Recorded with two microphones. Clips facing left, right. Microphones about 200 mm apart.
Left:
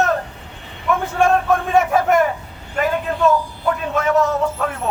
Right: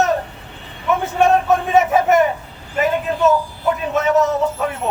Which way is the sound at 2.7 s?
5° right (ahead or behind).